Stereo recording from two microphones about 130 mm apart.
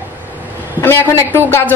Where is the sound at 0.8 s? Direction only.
15° left (ahead or behind).